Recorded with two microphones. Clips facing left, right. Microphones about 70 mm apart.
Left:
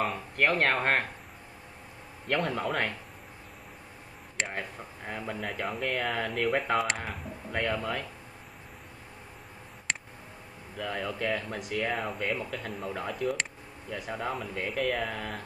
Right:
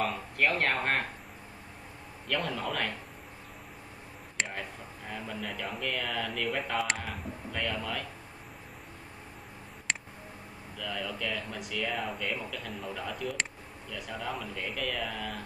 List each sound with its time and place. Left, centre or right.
0.1 s speech: left
2.2 s speech: left
4.5 s speech: left
5.6 s speech: left
6.1 s speech: left
6.4 s speech: left
7.0 s speech: left
9.9 s tick: centre
10.8 s speech: left